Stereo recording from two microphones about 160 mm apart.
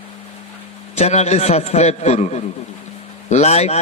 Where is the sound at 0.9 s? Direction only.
45° left (ahead or behind).